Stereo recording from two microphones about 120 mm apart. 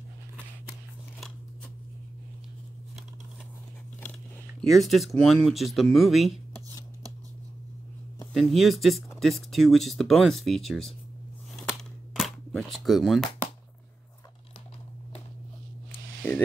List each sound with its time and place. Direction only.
4.0 s biting: 10° left (ahead or behind)
4.6 s speech: centre (ahead or behind)
8.3 s speech: centre (ahead or behind)
11.5 s cap gun: centre (ahead or behind)
16.2 s a sound: 20° left (ahead or behind)